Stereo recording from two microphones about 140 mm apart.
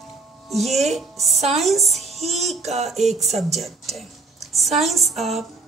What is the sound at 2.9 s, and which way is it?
Speech, centre (ahead or behind).